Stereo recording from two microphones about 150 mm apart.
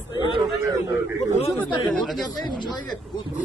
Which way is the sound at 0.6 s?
20° right (ahead or behind).